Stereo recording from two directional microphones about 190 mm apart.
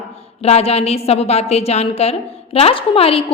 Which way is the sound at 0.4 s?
35° left (ahead or behind).